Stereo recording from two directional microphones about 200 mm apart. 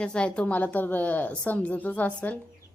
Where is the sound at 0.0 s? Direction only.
5° left (ahead or behind).